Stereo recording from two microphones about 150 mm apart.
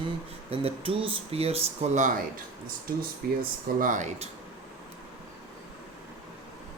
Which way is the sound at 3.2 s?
85° right.